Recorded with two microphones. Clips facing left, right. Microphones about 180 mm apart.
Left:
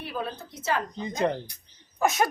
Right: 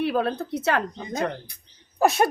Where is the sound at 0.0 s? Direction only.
70° right (ahead or behind).